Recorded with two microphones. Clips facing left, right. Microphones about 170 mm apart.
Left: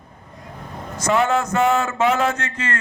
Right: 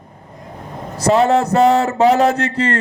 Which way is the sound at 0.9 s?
35° right (ahead or behind).